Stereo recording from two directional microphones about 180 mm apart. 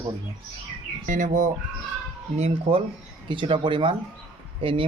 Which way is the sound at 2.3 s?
35° right (ahead or behind).